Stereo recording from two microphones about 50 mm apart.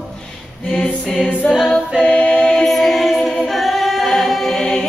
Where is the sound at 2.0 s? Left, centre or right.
Left.